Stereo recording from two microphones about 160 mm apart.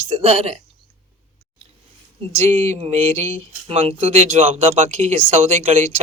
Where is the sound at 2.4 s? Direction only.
45° right (ahead or behind).